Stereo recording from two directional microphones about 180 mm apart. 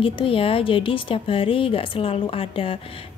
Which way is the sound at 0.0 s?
30° left (ahead or behind).